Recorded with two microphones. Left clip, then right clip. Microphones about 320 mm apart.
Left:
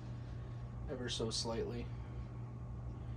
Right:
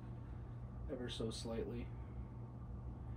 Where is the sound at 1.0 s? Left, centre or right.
Centre.